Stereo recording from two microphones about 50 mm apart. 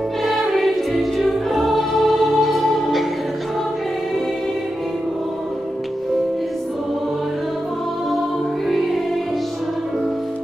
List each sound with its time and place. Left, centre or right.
0.2 s music: centre
8.6 s music: centre